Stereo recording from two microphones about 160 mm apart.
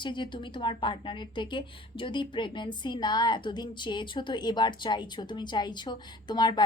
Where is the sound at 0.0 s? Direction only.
30° left (ahead or behind).